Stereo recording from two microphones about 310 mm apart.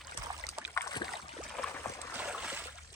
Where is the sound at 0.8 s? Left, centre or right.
Centre.